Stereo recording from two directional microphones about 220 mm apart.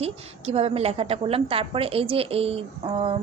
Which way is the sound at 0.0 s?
25° right (ahead or behind).